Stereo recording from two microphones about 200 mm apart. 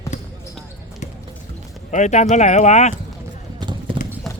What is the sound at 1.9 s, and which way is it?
Speech, 35° left (ahead or behind).